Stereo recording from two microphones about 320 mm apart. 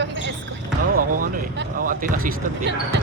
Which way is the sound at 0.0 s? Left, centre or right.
Right.